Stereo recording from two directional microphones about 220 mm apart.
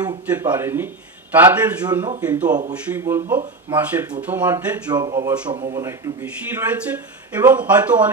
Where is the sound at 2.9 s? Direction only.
10° right (ahead or behind).